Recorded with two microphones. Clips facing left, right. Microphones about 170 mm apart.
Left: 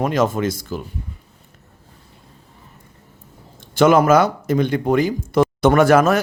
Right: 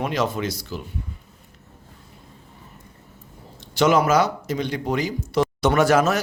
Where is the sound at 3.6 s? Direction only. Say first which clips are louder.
Left 5 dB; 50° left (ahead or behind).